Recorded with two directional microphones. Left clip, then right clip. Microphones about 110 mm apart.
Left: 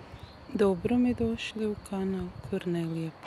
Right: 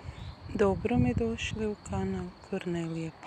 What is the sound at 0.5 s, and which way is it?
Speech, 30° left (ahead or behind).